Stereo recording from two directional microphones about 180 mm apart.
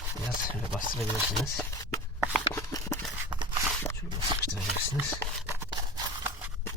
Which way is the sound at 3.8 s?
15° left (ahead or behind).